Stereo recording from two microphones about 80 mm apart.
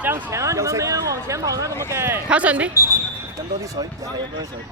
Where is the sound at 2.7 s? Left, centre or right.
Left.